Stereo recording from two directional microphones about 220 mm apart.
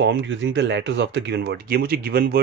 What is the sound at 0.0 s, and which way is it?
Speech, 55° right (ahead or behind).